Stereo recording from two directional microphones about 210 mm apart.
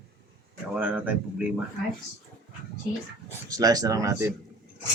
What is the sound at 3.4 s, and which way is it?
Speech, 15° right (ahead or behind).